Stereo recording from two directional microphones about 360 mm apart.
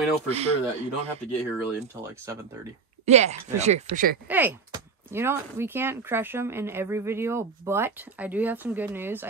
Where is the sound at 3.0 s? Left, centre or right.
Centre.